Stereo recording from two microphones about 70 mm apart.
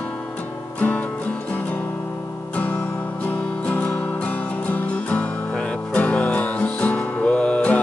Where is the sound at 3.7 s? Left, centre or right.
Centre.